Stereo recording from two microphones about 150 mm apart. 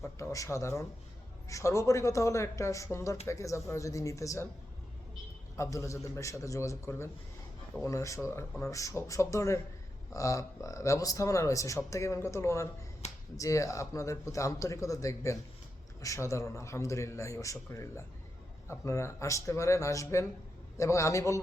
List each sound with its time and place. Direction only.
0.0 s speech: 20° left (ahead or behind)
5.5 s speech: 20° left (ahead or behind)